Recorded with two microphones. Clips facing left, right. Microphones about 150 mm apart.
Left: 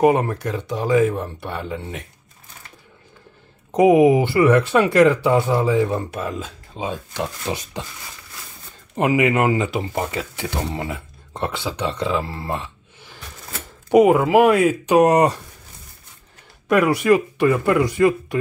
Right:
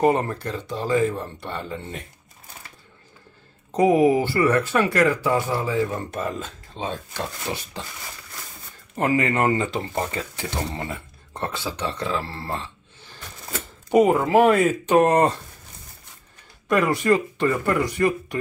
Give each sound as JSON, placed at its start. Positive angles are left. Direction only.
{"t": 0.0, "sound": "speech", "side_deg": 10}
{"t": 3.7, "sound": "speech", "side_deg": 15}
{"t": 6.1, "sound": "speech", "side_deg": 5}
{"t": 8.9, "sound": "speech", "side_deg": 15}
{"t": 16.6, "sound": "speech", "side_deg": 10}